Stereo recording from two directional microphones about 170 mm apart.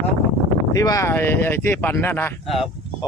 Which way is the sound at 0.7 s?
20° left (ahead or behind).